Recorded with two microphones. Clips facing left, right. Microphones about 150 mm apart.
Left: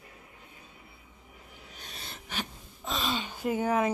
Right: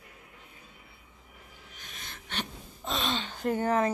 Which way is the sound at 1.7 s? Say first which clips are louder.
Left 2 dB; 35° left (ahead or behind).